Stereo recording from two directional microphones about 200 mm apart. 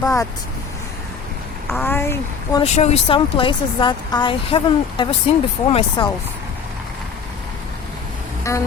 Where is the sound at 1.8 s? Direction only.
10° left (ahead or behind).